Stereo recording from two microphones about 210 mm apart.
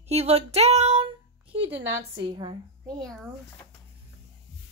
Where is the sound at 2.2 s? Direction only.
20° right (ahead or behind).